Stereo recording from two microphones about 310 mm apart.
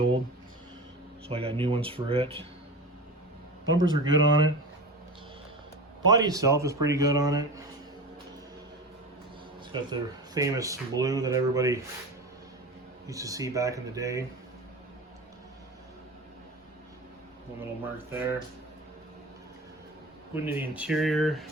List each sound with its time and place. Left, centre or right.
1.3 s speech: centre
3.8 s speech: right
6.1 s speech: centre
9.9 s speech: centre
13.1 s speech: centre
17.6 s speech: centre
20.3 s speech: centre